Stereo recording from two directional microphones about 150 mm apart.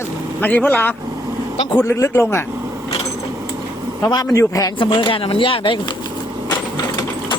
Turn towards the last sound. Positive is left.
turn(degrees=35)  # may be behind; listen again after turning